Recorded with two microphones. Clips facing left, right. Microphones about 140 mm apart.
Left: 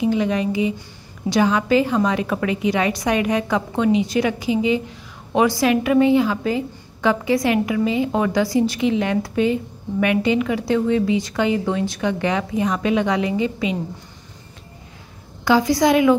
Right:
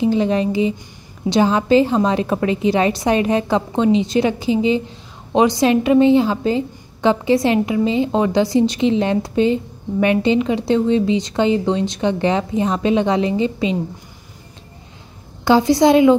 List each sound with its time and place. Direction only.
0.0 s a woman's voice: 30° right (ahead or behind)
15.4 s a woman's voice: 25° right (ahead or behind)